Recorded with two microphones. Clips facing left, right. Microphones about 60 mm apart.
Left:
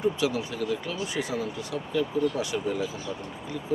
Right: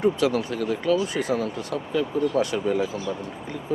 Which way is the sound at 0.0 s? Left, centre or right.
Right.